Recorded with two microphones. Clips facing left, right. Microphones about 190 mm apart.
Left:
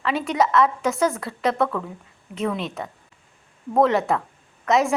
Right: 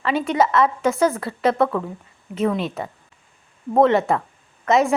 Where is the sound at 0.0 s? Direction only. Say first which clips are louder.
Right 2 dB; centre (ahead or behind).